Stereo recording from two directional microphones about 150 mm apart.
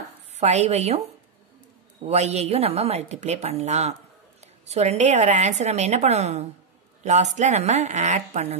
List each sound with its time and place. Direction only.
0.4 s a woman's voice: 50° right (ahead or behind)
2.0 s a woman's voice: 45° right (ahead or behind)